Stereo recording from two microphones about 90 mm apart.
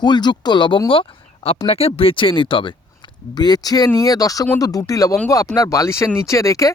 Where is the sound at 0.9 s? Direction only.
85° left.